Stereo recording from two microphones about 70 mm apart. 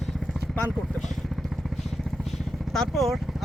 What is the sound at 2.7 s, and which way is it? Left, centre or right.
Speech, centre.